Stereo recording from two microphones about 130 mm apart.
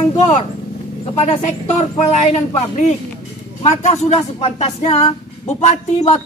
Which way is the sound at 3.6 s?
65° left (ahead or behind).